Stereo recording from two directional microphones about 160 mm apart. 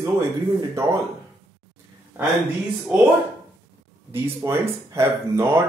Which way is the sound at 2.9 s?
10° right (ahead or behind).